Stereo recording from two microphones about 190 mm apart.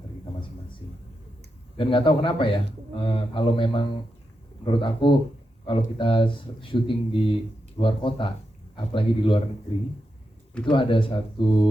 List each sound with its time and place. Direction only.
1.8 s speech: 25° left (ahead or behind)
10.7 s speech: 25° left (ahead or behind)